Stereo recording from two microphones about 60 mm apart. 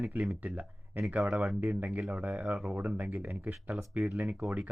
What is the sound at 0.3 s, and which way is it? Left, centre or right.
Speech, right.